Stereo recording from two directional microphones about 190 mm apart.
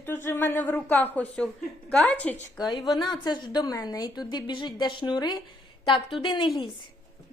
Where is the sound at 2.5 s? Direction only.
20° left (ahead or behind).